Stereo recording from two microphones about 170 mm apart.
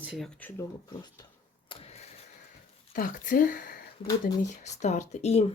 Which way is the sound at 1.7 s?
35° left (ahead or behind).